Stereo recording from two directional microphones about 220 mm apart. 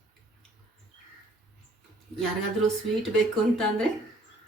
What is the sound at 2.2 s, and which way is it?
Speech, centre (ahead or behind).